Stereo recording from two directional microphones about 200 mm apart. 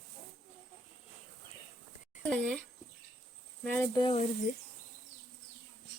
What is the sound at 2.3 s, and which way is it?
Speech, 5° left (ahead or behind).